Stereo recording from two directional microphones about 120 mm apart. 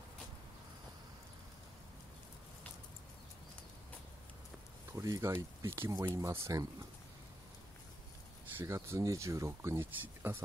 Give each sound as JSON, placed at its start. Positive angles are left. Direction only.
{"t": 4.9, "sound": "speech", "side_deg": -25}
{"t": 8.5, "sound": "speech", "side_deg": -20}